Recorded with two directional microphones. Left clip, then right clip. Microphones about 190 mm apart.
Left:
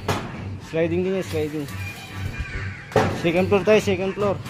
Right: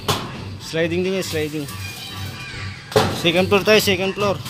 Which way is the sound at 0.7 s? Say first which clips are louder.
Right 2 dB; centre (ahead or behind).